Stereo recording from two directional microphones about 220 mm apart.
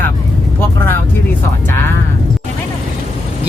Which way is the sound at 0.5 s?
10° left (ahead or behind).